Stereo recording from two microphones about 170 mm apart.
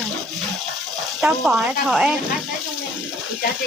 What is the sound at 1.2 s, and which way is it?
Speech, 5° right (ahead or behind).